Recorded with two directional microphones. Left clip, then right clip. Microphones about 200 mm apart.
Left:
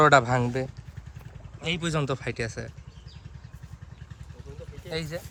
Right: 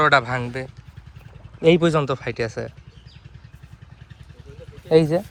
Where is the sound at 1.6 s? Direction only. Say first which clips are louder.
Right 15 dB; 20° right (ahead or behind).